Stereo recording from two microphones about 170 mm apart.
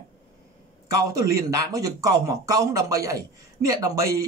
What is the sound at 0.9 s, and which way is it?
Speech, 20° right (ahead or behind).